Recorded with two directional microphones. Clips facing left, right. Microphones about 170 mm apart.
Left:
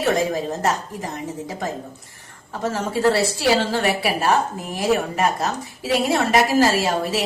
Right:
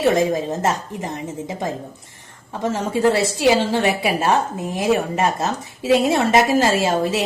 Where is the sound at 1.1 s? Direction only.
20° right (ahead or behind).